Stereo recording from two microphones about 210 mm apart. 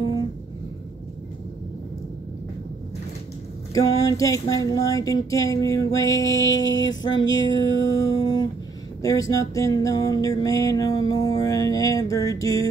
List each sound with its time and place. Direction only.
3.7 s music: 15° left (ahead or behind)
6.6 s a sound: 65° left (ahead or behind)
6.9 s music: 20° left (ahead or behind)